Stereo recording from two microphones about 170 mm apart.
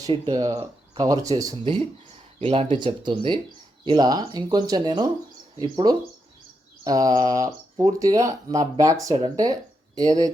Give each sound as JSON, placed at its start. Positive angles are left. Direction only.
{"t": 0.0, "sound": "speech", "side_deg": -25}